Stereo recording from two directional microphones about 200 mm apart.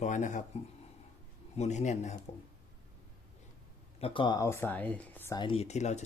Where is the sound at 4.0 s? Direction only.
25° left (ahead or behind); by 5.3 s 10° left (ahead or behind).